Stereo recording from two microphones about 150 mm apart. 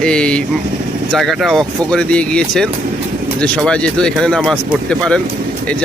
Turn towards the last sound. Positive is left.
turn(degrees=5)  # may be behind; listen again after turning